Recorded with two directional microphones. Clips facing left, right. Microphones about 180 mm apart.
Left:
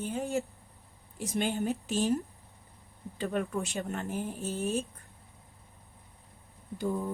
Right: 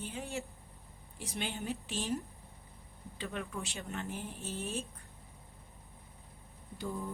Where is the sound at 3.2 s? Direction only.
45° left (ahead or behind).